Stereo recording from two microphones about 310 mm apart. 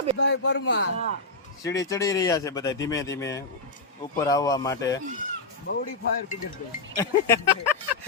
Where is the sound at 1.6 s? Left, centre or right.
Centre.